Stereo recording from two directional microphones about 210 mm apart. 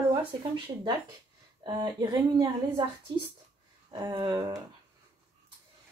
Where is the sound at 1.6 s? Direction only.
20° right (ahead or behind).